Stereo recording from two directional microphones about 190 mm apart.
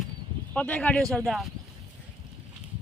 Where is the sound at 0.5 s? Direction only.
5° left (ahead or behind).